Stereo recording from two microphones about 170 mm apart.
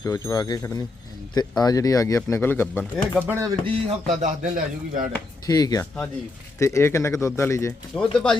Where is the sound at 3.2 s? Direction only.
15° right (ahead or behind).